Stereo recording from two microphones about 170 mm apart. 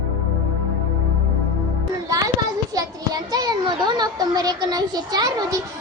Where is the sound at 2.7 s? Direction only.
20° right (ahead or behind).